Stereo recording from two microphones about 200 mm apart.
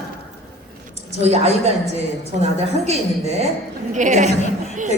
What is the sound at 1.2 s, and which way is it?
Speech, 30° right (ahead or behind).